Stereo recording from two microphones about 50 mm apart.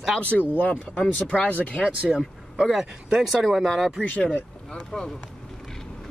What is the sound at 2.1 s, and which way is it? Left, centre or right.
Speech, centre.